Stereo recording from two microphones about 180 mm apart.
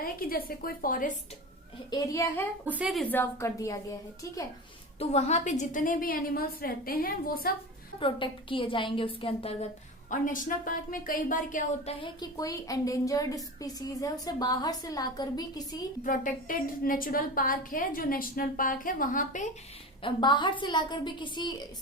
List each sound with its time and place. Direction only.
0.0 s a woman's voice: 55° left (ahead or behind)
1.9 s a woman's voice: 15° left (ahead or behind)
2.6 s a woman's voice: 5° right (ahead or behind)
3.0 s a woman's voice: 10° left (ahead or behind)
4.9 s a woman's voice: 35° left (ahead or behind); by 7.5 s 55° left (ahead or behind)
7.9 s speech: 30° left (ahead or behind)
10.1 s a woman's voice: 50° left (ahead or behind)
11.9 s speech: 25° left (ahead or behind)
16.0 s a woman's voice: 50° left (ahead or behind)
20.0 s speech: 25° left (ahead or behind)